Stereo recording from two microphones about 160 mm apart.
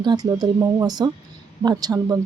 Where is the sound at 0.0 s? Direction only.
25° right (ahead or behind).